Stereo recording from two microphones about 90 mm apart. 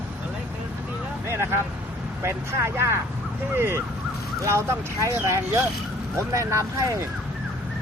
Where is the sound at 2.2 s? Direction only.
30° right (ahead or behind).